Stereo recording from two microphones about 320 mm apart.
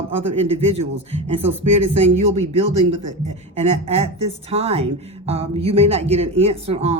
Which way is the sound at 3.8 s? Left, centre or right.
Centre.